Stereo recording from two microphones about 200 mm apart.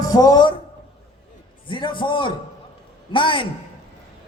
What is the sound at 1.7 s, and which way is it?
A man's voice, 25° left (ahead or behind).